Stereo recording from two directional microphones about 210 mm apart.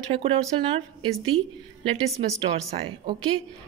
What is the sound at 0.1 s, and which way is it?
Speech, 25° right (ahead or behind).